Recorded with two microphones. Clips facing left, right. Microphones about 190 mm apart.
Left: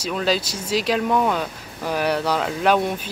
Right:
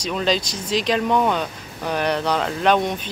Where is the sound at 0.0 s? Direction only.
5° left (ahead or behind).